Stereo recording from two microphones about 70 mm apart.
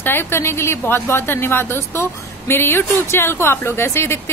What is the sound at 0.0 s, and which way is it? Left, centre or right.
Speech, left.